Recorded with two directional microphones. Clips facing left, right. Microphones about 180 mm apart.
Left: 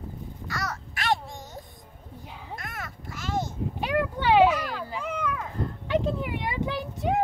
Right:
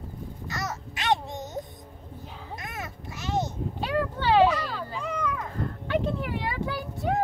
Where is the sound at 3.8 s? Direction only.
15° left (ahead or behind).